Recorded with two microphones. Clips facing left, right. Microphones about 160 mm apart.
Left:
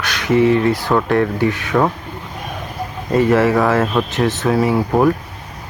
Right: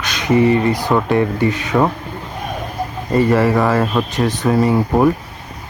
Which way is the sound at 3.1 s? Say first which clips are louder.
Left 1 dB; centre (ahead or behind).